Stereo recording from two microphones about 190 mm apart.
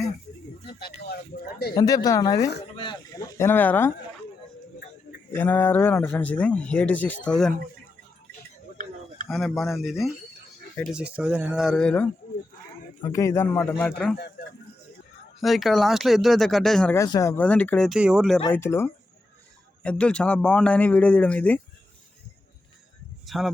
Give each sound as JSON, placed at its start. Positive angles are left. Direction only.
{"t": 0.6, "sound": "speech", "side_deg": 55}
{"t": 1.7, "sound": "speech", "side_deg": 20}
{"t": 5.3, "sound": "speech", "side_deg": 10}
{"t": 9.3, "sound": "speech", "side_deg": 0}
{"t": 13.1, "sound": "speech", "side_deg": 15}
{"t": 15.4, "sound": "speech", "side_deg": 0}
{"t": 17.0, "sound": "speech", "side_deg": 15}
{"t": 18.4, "sound": "speech", "side_deg": 10}
{"t": 23.2, "sound": "a sound", "side_deg": 0}